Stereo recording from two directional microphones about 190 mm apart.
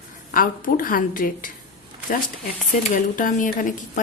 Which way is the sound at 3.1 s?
45° left (ahead or behind).